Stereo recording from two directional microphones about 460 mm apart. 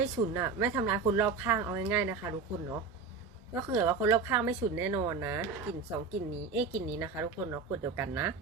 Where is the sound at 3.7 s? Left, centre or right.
Centre.